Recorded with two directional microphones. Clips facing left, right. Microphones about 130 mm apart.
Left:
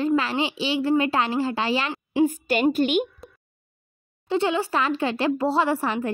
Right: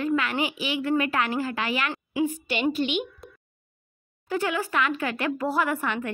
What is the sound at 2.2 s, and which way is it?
Speech, 45° left (ahead or behind).